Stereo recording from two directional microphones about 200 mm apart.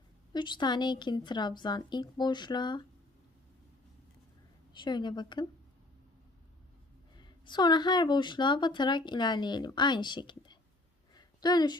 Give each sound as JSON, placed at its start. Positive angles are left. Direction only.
{"t": 0.3, "sound": "a woman's voice", "side_deg": 20}
{"t": 4.7, "sound": "a woman's voice", "side_deg": 20}
{"t": 7.2, "sound": "a woman's voice", "side_deg": 20}
{"t": 11.1, "sound": "a sound", "side_deg": 20}